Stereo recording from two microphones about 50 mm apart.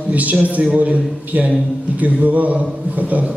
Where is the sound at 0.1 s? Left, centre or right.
Right.